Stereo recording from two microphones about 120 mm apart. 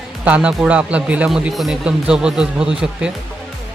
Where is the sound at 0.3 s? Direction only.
10° right (ahead or behind).